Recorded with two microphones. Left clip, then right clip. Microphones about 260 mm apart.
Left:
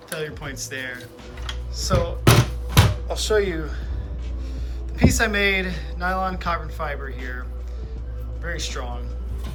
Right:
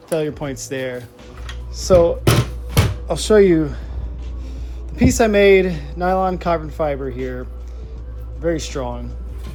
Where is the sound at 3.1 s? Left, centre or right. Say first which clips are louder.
Right 9 dB; right.